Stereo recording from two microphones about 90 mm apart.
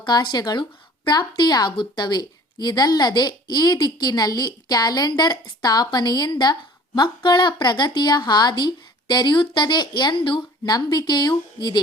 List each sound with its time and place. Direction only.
0.0 s speech: 55° left (ahead or behind)